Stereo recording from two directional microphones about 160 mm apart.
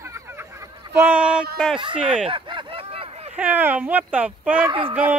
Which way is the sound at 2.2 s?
30° right (ahead or behind).